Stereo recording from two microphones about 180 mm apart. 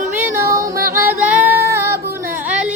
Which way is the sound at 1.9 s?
60° right (ahead or behind).